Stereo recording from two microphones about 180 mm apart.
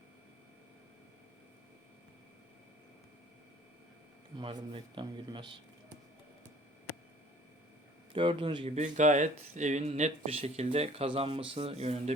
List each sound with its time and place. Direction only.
4.4 s a man's voice: 30° right (ahead or behind)
8.1 s speech: 30° right (ahead or behind)